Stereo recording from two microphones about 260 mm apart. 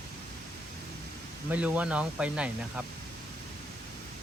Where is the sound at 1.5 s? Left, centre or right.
Centre.